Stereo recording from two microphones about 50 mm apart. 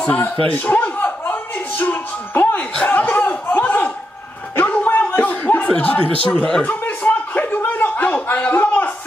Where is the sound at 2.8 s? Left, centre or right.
Left.